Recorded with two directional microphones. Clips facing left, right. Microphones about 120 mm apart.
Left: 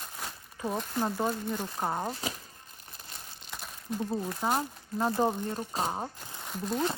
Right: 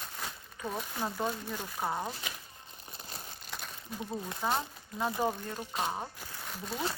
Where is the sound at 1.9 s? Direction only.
20° left (ahead or behind).